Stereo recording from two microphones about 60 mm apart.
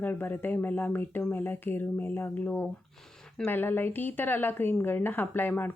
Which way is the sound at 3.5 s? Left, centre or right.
Left.